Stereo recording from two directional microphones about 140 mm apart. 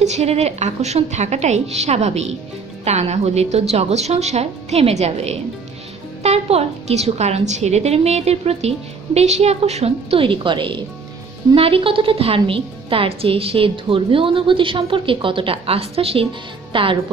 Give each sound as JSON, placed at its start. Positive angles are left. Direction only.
{"t": 0.0, "sound": "a woman's voice", "side_deg": -50}